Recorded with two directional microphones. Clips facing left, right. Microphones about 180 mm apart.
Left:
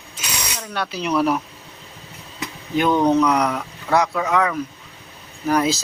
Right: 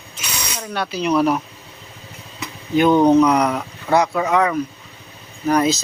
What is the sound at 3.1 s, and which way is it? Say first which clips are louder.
Speech: right 3 dB; centre (ahead or behind).